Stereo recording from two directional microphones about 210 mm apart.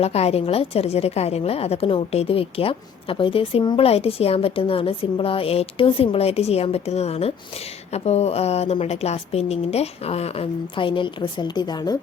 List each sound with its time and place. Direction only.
0.0 s a woman's voice: 30° left (ahead or behind)